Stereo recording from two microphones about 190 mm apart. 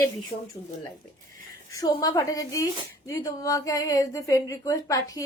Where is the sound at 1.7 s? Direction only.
20° left (ahead or behind).